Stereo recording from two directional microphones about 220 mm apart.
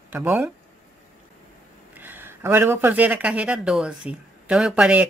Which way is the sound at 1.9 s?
10° right (ahead or behind).